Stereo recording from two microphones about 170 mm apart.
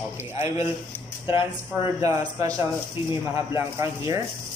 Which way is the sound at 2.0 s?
20° right (ahead or behind).